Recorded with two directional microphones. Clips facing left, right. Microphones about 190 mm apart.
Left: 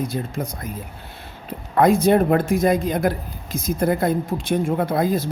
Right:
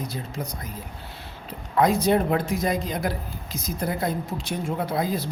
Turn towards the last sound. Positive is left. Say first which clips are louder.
# left 5 dB
turn(degrees=50)  # may be behind; listen again after turning